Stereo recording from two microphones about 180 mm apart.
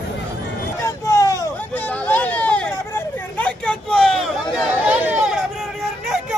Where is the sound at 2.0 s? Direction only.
10° left (ahead or behind).